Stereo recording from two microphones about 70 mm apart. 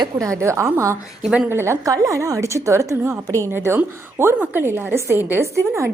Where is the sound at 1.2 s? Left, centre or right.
Centre.